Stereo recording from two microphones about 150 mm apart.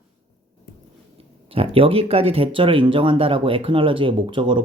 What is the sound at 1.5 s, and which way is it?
Speech, 40° right (ahead or behind).